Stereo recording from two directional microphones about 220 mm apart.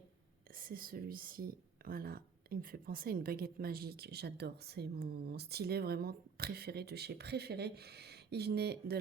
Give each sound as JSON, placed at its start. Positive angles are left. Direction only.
{"t": 0.5, "sound": "speech", "side_deg": -40}